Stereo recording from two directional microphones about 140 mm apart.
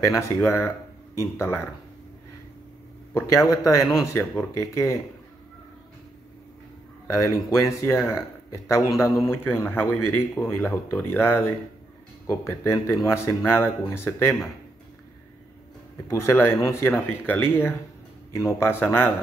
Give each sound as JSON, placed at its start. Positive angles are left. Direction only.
{"t": 0.2, "sound": "speech", "side_deg": 15}
{"t": 3.2, "sound": "speech", "side_deg": 20}
{"t": 7.1, "sound": "speech", "side_deg": 20}
{"t": 16.1, "sound": "speech", "side_deg": 20}